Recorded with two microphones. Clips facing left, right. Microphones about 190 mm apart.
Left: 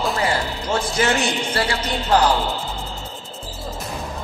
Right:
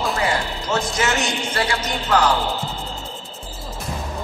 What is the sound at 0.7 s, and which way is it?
A man's voice, 30° left (ahead or behind).